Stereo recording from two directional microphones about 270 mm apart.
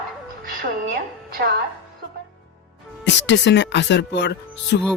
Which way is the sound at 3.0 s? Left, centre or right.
Left.